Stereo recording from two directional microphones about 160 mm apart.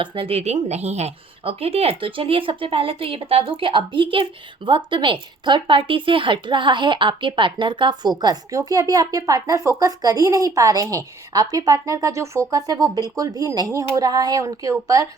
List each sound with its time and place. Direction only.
0.0 s speech: 30° right (ahead or behind)